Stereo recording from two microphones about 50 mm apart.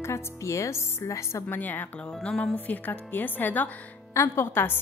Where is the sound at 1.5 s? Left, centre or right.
Left.